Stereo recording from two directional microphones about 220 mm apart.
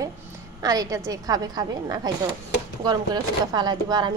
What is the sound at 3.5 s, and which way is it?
Speech, 20° right (ahead or behind).